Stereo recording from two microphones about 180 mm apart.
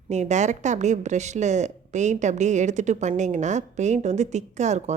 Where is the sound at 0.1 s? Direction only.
40° right (ahead or behind).